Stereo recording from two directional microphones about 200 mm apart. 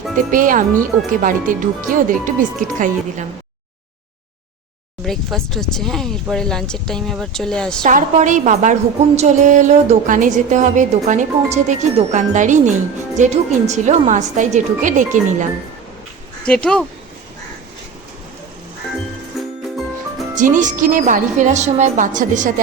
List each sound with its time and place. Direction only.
0.3 s a woman's voice: 40° right (ahead or behind)
5.0 s speech: centre (ahead or behind)
7.9 s a woman's voice: 40° right (ahead or behind)
16.5 s speech: 5° left (ahead or behind)
19.3 s music: centre (ahead or behind)
20.3 s a woman's voice: 40° right (ahead or behind)